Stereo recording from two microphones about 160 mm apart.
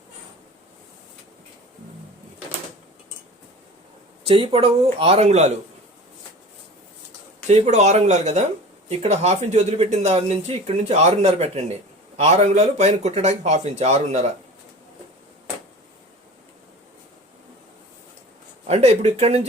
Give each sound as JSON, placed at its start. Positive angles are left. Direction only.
{"t": 4.3, "sound": "speech", "side_deg": -35}
{"t": 7.4, "sound": "speech", "side_deg": -45}
{"t": 18.6, "sound": "speech", "side_deg": -40}